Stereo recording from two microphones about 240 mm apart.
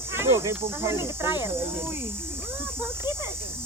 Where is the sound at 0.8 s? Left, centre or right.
Centre.